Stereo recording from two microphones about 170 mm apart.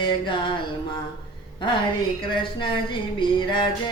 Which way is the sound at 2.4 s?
30° left (ahead or behind).